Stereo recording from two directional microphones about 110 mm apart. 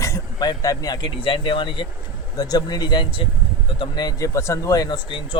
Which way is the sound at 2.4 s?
35° left (ahead or behind).